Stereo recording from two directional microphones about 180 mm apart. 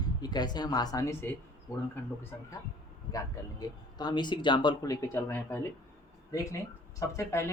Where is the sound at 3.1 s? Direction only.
20° left (ahead or behind).